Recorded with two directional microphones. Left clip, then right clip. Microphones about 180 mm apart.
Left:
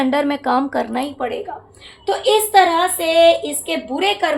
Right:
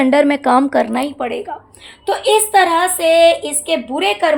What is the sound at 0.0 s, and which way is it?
A woman's voice, 35° right (ahead or behind).